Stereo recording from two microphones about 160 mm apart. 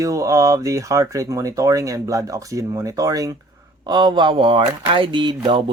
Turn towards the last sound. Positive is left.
turn(degrees=-30)  # may be behind; listen again after turning